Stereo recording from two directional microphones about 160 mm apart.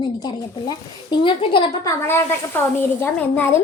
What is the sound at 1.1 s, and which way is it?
Speech, 30° left (ahead or behind).